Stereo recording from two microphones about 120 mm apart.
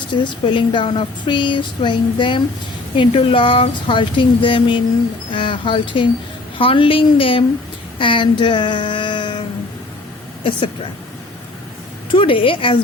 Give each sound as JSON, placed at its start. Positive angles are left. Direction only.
{"t": 0.1, "sound": "speech", "side_deg": 45}
{"t": 7.9, "sound": "a sound", "side_deg": 45}
{"t": 12.1, "sound": "speech", "side_deg": 45}